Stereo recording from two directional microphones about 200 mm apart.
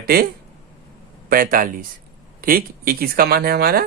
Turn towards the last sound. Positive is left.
turn(degrees=-50)  # may be behind; listen again after turning